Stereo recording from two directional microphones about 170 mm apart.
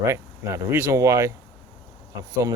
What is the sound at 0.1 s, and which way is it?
Speech, 15° right (ahead or behind).